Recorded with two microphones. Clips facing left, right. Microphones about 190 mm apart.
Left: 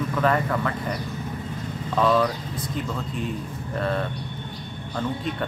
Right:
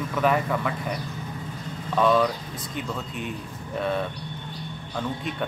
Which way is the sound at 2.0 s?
Centre (ahead or behind).